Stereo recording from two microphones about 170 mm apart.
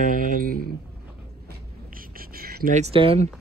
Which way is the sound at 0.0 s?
55° right (ahead or behind).